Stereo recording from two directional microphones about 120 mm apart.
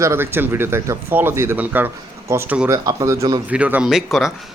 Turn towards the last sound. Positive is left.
turn(degrees=-5)  # may be behind; listen again after turning